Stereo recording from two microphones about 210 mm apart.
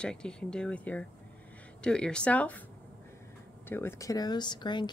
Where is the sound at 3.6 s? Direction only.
10° left (ahead or behind).